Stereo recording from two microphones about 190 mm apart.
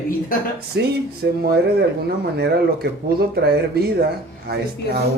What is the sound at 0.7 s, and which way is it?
Speech, 60° right (ahead or behind).